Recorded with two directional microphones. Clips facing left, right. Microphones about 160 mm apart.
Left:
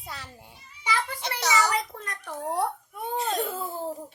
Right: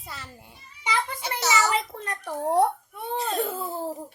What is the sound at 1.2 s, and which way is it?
Speech, 5° right (ahead or behind).